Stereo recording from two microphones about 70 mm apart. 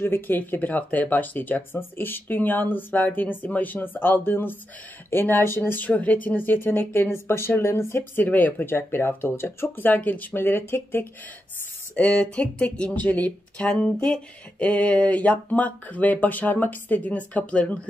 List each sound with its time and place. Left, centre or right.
0.0 s speech: left
5.7 s speech: left
11.9 s speech: centre